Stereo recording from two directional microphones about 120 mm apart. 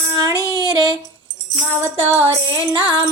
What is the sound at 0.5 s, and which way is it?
Music, 35° right (ahead or behind).